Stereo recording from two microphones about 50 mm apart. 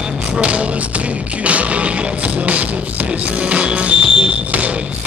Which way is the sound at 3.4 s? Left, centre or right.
Right.